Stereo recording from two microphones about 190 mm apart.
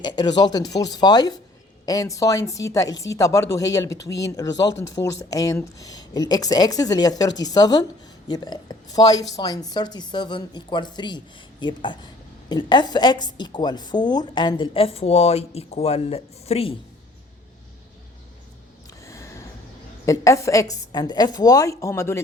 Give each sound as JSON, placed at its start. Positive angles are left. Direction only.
{"t": 0.0, "sound": "a woman's voice", "side_deg": 20}
{"t": 19.0, "sound": "a sound", "side_deg": 15}
{"t": 20.1, "sound": "a woman's voice", "side_deg": 15}